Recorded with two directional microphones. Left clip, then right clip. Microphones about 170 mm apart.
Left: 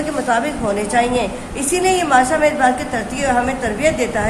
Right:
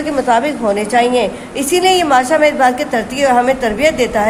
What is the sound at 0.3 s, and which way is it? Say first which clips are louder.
A woman's voice: right 5 dB; 25° right (ahead or behind).